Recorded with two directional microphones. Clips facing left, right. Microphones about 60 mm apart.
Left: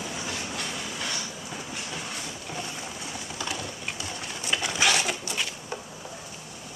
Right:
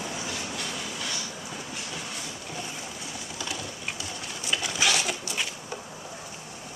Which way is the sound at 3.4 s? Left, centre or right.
Left.